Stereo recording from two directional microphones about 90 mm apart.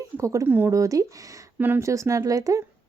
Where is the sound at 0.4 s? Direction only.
25° right (ahead or behind).